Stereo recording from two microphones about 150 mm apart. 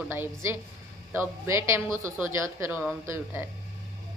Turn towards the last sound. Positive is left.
turn(degrees=-15)  # may be behind; listen again after turning